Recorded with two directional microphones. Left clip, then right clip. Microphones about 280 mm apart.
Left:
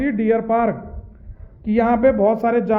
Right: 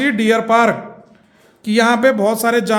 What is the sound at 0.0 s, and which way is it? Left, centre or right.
A man's voice, centre.